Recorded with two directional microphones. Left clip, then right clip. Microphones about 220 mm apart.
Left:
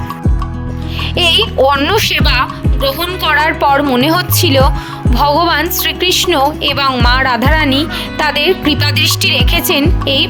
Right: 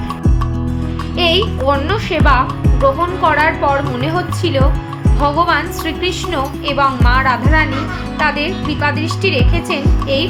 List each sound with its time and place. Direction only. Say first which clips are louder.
1.1 s speech: left 4 dB; 50° left (ahead or behind)